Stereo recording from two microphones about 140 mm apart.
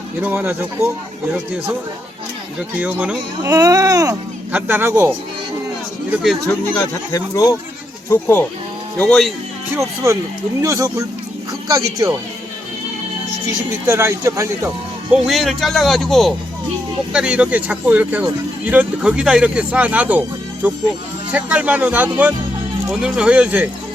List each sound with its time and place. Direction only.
0.2 s speech: 10° right (ahead or behind)
2.8 s speech: 10° right (ahead or behind)
3.4 s speech: 25° right (ahead or behind)
4.5 s speech: 15° right (ahead or behind)
8.1 s speech: 10° left (ahead or behind)
9.7 s speech: 20° right (ahead or behind)
13.8 s speech: 20° right (ahead or behind)
15.1 s speech: centre (ahead or behind)